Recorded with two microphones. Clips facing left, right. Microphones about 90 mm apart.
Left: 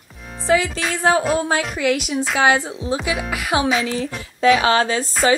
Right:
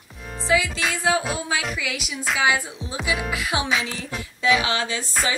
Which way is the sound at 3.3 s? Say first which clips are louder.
Left 9 dB; 50° left (ahead or behind).